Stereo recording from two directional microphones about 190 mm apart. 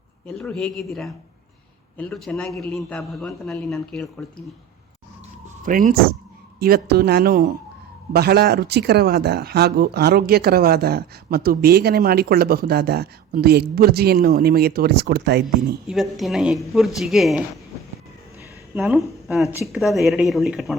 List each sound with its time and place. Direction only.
0.3 s speech: 5° left (ahead or behind)
5.6 s a woman's voice: 45° right (ahead or behind)
15.9 s speech: centre (ahead or behind)
18.7 s speech: 5° right (ahead or behind)